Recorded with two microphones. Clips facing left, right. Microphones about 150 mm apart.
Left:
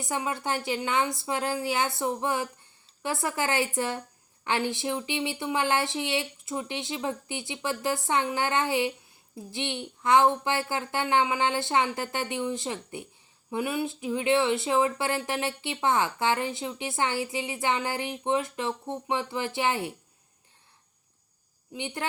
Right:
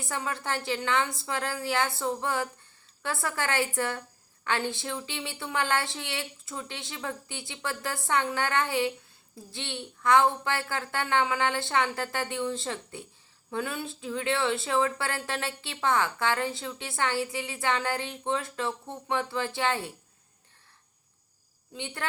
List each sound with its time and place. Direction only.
0.0 s speech: 20° left (ahead or behind)
21.7 s speech: 20° left (ahead or behind)